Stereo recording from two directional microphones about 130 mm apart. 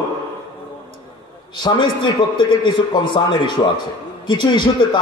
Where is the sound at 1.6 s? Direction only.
40° left (ahead or behind).